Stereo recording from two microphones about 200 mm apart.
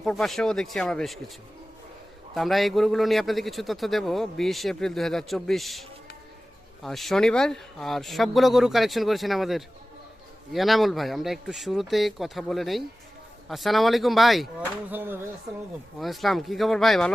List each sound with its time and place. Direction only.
0.0 s a man's voice: centre (ahead or behind)
2.3 s a man's voice: centre (ahead or behind)
6.8 s a man's voice: centre (ahead or behind)
16.0 s a man's voice: centre (ahead or behind)